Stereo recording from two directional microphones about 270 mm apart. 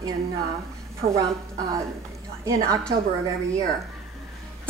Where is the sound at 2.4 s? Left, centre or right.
Centre.